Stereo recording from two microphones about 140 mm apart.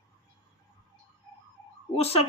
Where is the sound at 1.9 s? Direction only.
45° left (ahead or behind).